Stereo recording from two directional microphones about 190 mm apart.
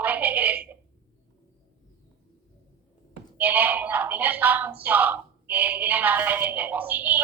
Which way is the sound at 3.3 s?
10° right (ahead or behind).